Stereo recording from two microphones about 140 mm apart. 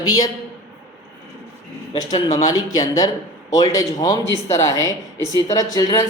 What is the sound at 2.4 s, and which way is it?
Speech, 25° left (ahead or behind).